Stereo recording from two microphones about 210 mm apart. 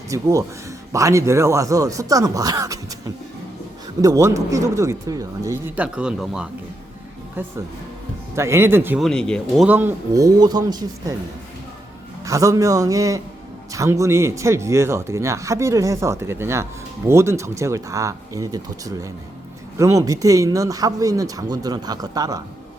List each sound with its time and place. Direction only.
0.1 s speech: 15° right (ahead or behind)
4.0 s speech: 15° right (ahead or behind)
9.0 s speech: 5° left (ahead or behind)
9.6 s speech: 10° right (ahead or behind)
12.2 s speech: 15° right (ahead or behind)